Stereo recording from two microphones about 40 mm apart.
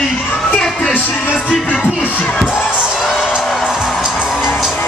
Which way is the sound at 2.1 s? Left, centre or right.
Left.